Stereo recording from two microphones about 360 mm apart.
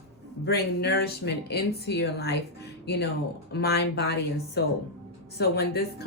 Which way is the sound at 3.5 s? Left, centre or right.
Left.